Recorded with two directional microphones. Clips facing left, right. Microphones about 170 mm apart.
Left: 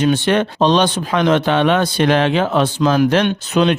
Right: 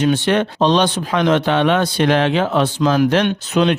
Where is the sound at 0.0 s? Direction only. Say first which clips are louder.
Left 1 dB; 45° left (ahead or behind).